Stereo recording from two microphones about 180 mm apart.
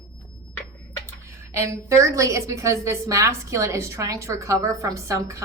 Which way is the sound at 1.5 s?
15° right (ahead or behind).